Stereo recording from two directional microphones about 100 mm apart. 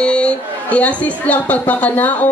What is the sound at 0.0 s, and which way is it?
Speech, 10° left (ahead or behind).